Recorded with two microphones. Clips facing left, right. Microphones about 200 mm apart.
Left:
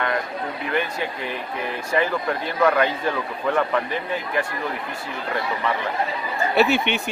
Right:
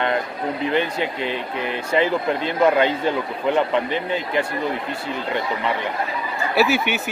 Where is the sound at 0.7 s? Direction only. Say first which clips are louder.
Right 3 dB; 25° right (ahead or behind).